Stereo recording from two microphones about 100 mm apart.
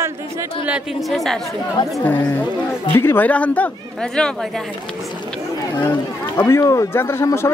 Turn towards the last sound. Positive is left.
turn(degrees=25)  # may be behind; listen again after turning